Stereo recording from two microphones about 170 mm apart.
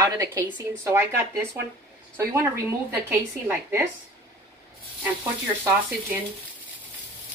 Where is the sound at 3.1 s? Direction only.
15° right (ahead or behind).